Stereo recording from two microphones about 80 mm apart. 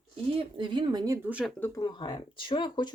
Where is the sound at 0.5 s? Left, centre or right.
Right.